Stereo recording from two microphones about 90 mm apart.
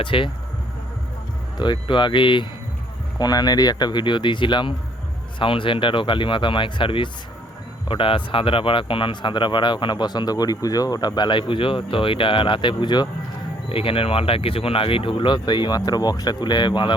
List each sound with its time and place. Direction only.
0.0 s speech: 75° left (ahead or behind)
1.5 s speech: 55° left (ahead or behind)
3.2 s speech: 45° left (ahead or behind)
13.7 s speech: 90° left; by 16.9 s 60° left (ahead or behind)